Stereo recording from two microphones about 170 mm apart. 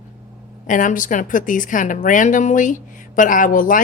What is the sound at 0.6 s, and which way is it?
Speech, 50° left (ahead or behind).